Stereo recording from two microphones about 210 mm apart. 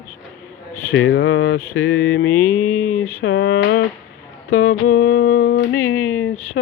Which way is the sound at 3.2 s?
55° left (ahead or behind).